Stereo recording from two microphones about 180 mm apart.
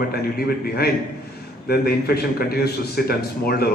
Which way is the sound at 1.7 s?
60° left (ahead or behind).